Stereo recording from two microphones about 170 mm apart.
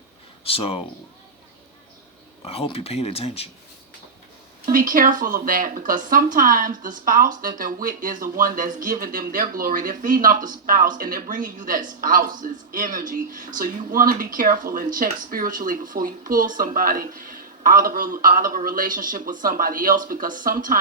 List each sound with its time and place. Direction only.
0.4 s speech: 35° left (ahead or behind)
2.4 s speech: 35° left (ahead or behind)
4.6 s speech: 55° right (ahead or behind)